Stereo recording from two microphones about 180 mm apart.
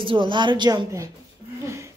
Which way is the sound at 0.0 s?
25° right (ahead or behind).